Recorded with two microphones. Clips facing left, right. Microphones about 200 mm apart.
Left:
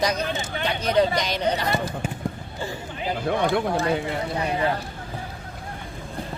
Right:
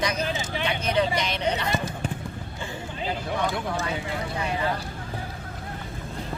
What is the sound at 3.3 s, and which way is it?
Speech, 60° left (ahead or behind).